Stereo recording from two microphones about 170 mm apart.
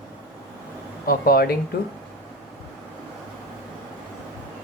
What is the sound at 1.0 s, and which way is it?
Speech, 60° left (ahead or behind).